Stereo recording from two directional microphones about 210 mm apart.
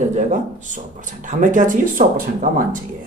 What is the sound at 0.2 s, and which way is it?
Speech, 35° right (ahead or behind).